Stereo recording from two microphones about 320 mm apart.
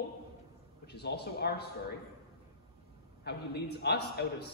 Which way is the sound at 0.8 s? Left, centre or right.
Left.